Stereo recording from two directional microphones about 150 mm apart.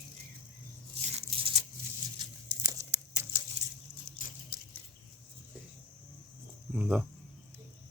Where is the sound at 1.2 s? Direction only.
40° right (ahead or behind).